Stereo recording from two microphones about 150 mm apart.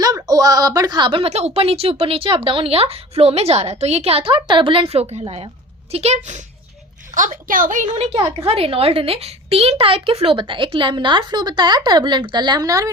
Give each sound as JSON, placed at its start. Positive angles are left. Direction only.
{"t": 0.0, "sound": "a woman's voice", "side_deg": -25}
{"t": 7.1, "sound": "a woman's voice", "side_deg": -60}
{"t": 8.4, "sound": "a woman's voice", "side_deg": -40}